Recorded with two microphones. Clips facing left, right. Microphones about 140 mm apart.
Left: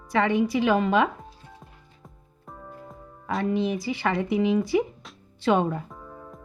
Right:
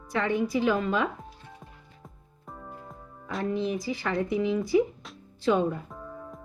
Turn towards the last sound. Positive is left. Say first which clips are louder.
# right 2 dB
turn(degrees=0)  # may be behind; listen again after turning